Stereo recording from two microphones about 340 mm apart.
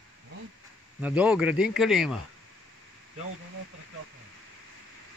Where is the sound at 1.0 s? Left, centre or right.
Centre.